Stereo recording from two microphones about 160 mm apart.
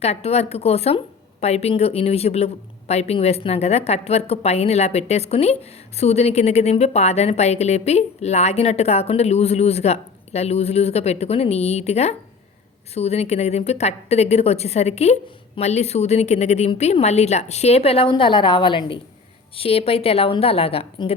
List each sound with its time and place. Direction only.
0.0 s a woman's voice: 40° left (ahead or behind)